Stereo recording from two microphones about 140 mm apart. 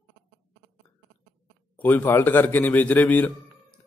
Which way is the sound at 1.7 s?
15° left (ahead or behind).